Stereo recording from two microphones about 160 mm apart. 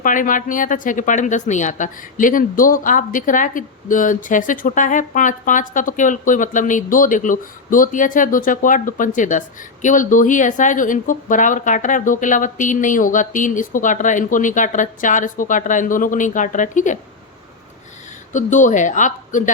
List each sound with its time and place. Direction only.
0.0 s speech: 55° left (ahead or behind)
18.3 s speech: 50° left (ahead or behind)